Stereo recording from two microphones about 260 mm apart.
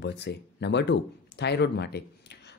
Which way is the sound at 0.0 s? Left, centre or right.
Left.